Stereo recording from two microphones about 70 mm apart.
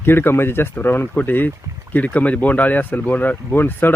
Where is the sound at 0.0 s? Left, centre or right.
Left.